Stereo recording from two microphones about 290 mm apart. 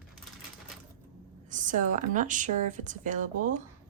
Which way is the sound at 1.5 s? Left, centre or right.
Right.